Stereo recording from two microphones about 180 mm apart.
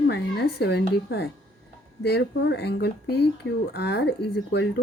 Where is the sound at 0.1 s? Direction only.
65° left (ahead or behind).